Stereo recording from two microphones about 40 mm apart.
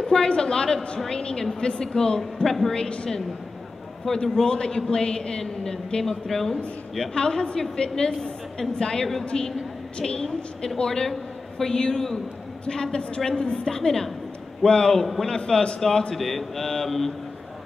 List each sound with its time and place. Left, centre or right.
0.0 s a woman's voice: centre
2.4 s speech: centre
2.7 s a woman's voice: left
4.0 s a woman's voice: centre
7.2 s a woman's voice: centre
12.6 s a woman's voice: centre
16.2 s speech: centre